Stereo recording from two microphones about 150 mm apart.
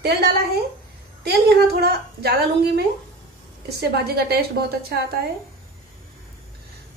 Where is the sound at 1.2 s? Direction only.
90° right.